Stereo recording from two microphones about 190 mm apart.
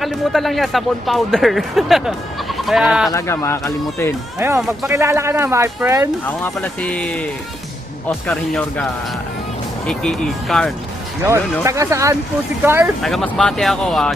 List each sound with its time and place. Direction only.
0.0 s speech: centre (ahead or behind)
3.1 s speech: 15° left (ahead or behind)
4.4 s speech: 15° right (ahead or behind)
6.2 s speech: 10° left (ahead or behind)
8.3 s speech: 5° left (ahead or behind)
11.6 s speech: 15° right (ahead or behind)
13.0 s speech: 5° left (ahead or behind)